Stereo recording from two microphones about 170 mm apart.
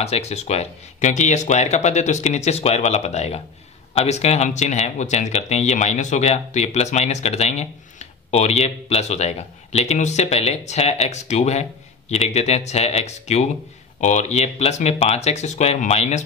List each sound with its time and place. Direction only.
0.0 s speech: 40° left (ahead or behind)